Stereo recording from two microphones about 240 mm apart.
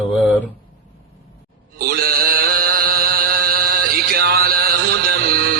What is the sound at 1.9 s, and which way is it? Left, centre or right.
Mantra, right.